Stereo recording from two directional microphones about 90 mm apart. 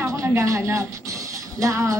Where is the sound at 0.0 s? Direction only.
35° right (ahead or behind).